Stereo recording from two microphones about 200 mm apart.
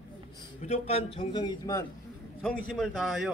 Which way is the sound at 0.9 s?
30° left (ahead or behind).